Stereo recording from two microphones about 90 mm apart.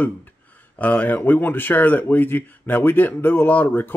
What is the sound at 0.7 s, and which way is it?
Speech, 20° left (ahead or behind).